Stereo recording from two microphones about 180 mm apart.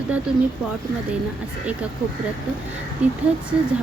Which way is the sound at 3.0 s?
5° right (ahead or behind).